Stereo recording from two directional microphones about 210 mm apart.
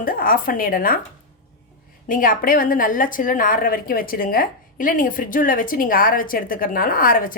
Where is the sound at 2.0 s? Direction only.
40° left (ahead or behind).